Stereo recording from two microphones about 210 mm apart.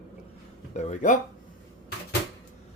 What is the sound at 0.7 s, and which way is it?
Speech, 35° left (ahead or behind).